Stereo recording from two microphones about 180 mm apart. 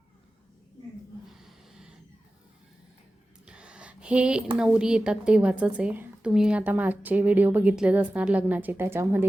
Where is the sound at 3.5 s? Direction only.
5° right (ahead or behind).